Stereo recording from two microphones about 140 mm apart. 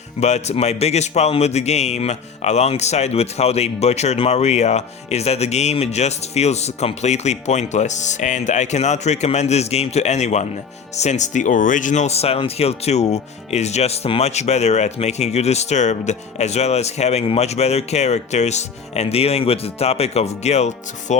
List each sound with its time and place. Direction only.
0.2 s speech: 55° left (ahead or behind)